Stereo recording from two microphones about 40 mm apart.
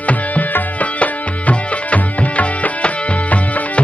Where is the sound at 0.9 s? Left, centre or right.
Left.